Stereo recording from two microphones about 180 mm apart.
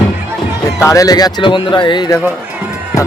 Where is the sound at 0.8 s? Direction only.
15° left (ahead or behind).